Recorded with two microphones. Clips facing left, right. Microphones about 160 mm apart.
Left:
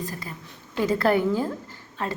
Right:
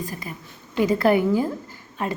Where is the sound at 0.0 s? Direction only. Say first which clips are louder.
Right 2 dB; 15° right (ahead or behind).